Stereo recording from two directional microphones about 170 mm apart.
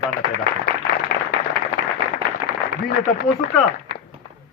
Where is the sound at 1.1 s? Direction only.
65° left (ahead or behind).